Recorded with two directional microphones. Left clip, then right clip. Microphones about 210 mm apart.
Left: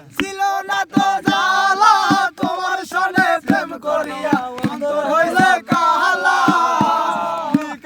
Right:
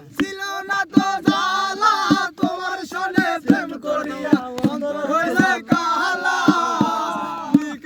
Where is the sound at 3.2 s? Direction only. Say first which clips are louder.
Left 4 dB; 30° left (ahead or behind).